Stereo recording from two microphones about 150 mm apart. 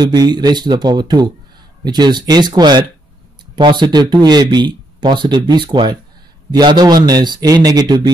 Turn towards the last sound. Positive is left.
turn(degrees=-25)  # may be behind; listen again after turning